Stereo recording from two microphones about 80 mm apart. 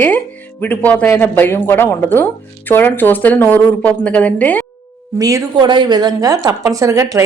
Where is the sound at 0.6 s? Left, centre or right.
Left.